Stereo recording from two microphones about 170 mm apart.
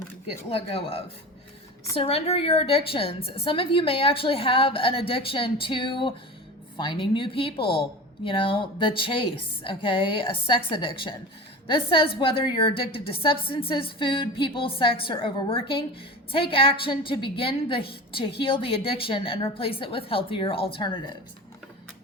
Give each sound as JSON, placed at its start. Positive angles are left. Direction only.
{"t": 0.5, "sound": "a woman's voice", "side_deg": 35}